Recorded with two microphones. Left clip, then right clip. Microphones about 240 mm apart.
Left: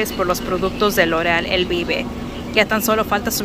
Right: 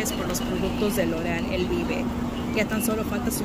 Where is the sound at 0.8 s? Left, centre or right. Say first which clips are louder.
Left 11 dB; centre.